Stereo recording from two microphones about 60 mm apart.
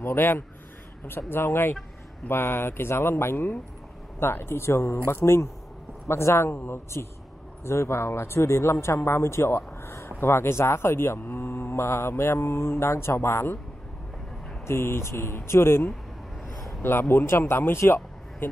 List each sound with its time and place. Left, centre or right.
0.0 s speech: left
14.7 s speech: left
17.1 s speech: left